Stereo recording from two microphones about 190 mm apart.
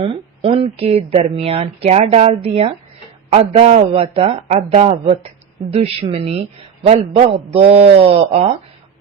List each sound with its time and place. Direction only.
0.0 s speech: 30° right (ahead or behind)